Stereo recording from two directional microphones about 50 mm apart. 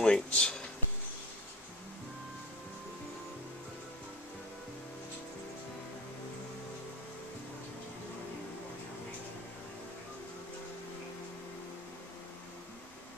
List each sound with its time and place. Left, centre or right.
0.0 s speech: centre